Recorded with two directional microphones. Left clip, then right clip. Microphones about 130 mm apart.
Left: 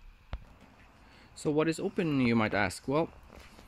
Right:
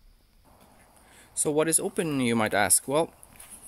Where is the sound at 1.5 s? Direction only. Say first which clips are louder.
Right 4 dB; 50° right (ahead or behind).